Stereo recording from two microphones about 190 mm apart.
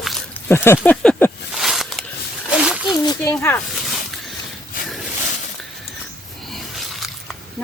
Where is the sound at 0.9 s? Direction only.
10° left (ahead or behind).